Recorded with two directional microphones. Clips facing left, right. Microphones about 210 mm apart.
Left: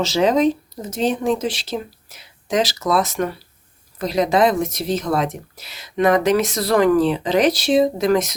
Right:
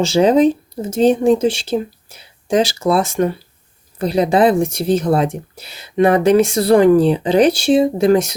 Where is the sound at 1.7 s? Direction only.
35° right (ahead or behind).